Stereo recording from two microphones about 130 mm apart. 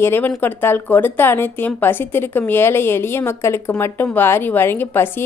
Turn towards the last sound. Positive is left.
turn(degrees=15)  # may be behind; listen again after turning